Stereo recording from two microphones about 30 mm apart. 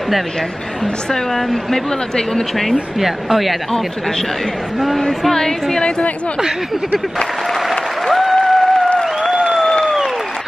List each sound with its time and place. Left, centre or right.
1.1 s speech: centre
3.0 s speech: centre
4.7 s speech: centre
5.3 s speech: centre
5.8 s a woman's voice: left
8.1 s applause: centre
8.5 s a sound: centre
9.2 s applause: centre